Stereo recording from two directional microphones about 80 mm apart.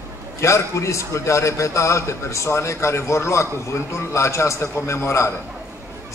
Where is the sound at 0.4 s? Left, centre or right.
Left.